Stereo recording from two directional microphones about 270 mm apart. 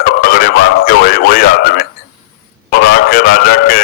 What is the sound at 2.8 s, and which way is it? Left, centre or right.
Speech, left.